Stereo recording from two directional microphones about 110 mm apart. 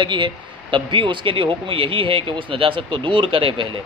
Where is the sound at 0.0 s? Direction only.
50° right (ahead or behind).